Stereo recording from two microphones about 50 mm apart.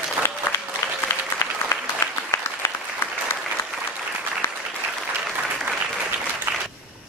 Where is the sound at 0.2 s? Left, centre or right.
Left.